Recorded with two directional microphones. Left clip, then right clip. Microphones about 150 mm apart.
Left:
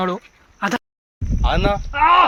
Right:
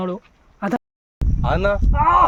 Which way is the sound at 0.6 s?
65° right (ahead or behind).